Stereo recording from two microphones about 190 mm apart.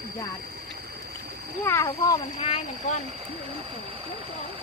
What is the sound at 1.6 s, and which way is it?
Speech, 15° left (ahead or behind).